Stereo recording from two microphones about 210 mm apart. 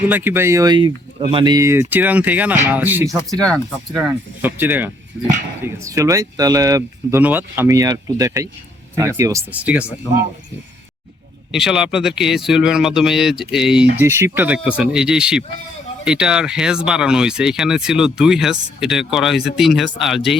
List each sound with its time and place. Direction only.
0.1 s speech: 10° right (ahead or behind)
11.5 s speech: centre (ahead or behind)